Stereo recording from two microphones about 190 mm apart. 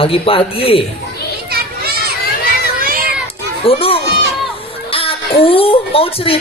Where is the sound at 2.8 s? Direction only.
50° right (ahead or behind).